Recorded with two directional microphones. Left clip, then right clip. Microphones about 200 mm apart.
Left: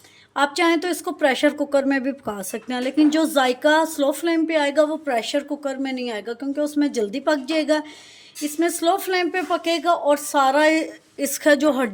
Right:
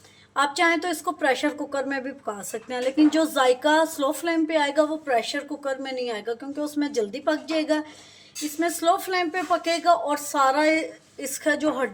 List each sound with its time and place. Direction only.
0.3 s a woman's voice: 35° left (ahead or behind)